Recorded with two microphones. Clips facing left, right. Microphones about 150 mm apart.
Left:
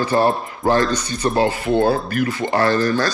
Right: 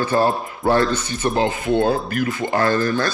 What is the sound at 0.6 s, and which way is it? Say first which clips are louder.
Speech: even; 40° left (ahead or behind).